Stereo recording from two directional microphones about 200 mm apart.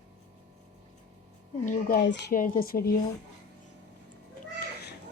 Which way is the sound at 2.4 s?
45° left (ahead or behind).